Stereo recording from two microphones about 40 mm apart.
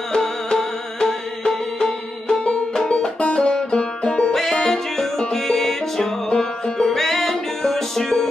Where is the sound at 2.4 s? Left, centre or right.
Left.